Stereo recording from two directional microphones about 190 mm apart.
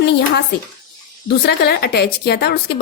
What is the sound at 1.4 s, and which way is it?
A woman's voice, 60° left (ahead or behind).